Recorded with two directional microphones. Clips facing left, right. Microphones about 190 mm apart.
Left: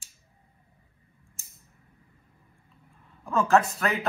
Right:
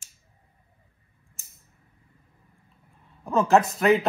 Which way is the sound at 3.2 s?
20° right (ahead or behind).